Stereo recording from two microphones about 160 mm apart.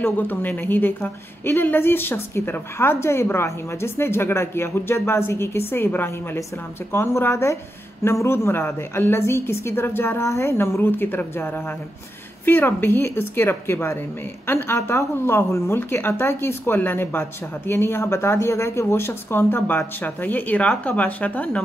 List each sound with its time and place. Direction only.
0.0 s a woman's voice: 10° left (ahead or behind)